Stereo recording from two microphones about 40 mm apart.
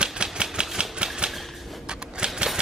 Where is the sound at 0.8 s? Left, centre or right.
Right.